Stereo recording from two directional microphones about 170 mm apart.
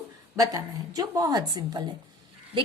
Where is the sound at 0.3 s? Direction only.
20° right (ahead or behind).